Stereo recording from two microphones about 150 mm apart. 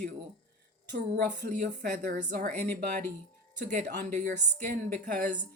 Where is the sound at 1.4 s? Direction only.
55° right (ahead or behind).